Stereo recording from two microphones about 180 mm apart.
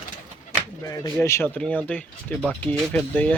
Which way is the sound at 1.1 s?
15° left (ahead or behind).